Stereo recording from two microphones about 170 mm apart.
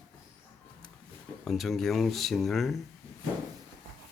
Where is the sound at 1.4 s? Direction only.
Centre (ahead or behind).